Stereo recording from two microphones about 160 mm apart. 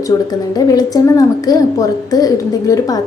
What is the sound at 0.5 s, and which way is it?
A woman's voice, 25° left (ahead or behind).